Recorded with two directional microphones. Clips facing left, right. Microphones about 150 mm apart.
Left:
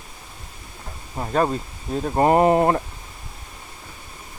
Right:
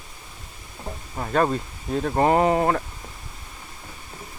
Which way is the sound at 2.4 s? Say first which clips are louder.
Left 3 dB; 20° left (ahead or behind).